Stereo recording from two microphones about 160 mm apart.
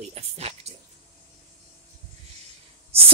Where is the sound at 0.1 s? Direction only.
40° right (ahead or behind).